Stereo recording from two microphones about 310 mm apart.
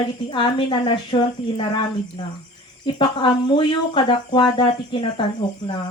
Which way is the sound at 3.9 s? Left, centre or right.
Centre.